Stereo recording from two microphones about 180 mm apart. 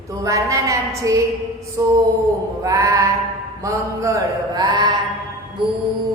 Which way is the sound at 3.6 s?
15° right (ahead or behind).